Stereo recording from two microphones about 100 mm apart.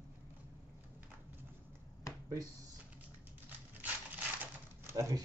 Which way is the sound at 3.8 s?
15° right (ahead or behind).